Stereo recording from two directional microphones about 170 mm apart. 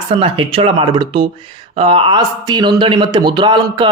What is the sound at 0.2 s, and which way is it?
Speech, 35° right (ahead or behind).